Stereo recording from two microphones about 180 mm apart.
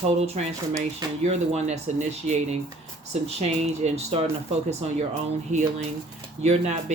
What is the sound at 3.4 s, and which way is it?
Speech, 35° right (ahead or behind).